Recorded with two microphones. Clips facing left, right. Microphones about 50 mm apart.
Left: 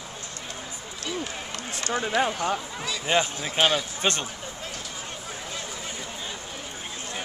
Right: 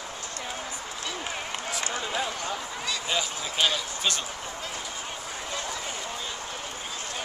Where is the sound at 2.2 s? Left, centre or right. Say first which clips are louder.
Left 5 dB; left.